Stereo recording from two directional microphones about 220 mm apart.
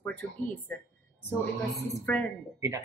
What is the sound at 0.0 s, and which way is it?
Speech, 10° left (ahead or behind).